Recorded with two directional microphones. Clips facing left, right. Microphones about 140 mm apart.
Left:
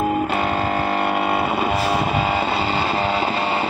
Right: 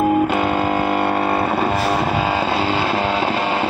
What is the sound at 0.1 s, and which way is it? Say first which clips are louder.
Music: right 4 dB; 15° right (ahead or behind).